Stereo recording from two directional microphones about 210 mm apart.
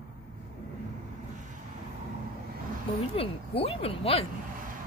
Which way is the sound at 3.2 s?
25° left (ahead or behind).